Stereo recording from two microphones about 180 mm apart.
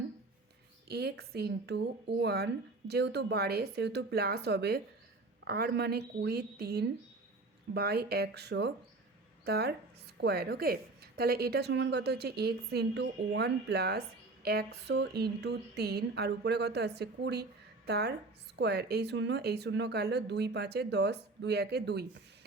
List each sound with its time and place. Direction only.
0.9 s a woman's voice: 65° right (ahead or behind)